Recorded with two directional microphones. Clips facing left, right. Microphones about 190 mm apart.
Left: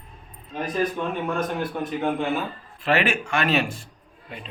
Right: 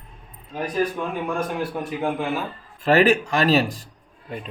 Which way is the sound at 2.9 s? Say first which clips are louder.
Right 6 dB; 40° right (ahead or behind).